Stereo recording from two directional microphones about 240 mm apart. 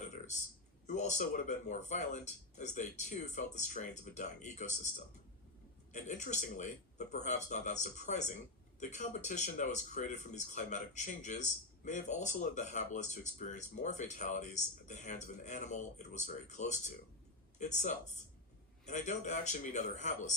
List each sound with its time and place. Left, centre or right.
0.9 s speech: left
5.9 s speech: left